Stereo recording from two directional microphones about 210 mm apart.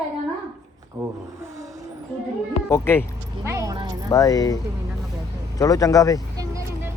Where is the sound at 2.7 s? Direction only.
10° left (ahead or behind).